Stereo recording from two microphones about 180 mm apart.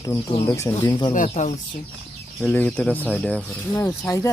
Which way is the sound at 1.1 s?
45° left (ahead or behind).